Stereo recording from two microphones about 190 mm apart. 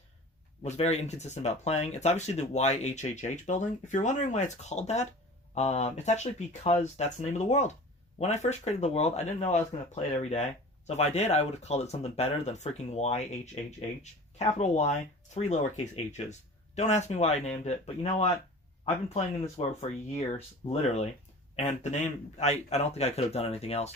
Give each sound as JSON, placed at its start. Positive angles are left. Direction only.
{"t": 0.6, "sound": "speech", "side_deg": 35}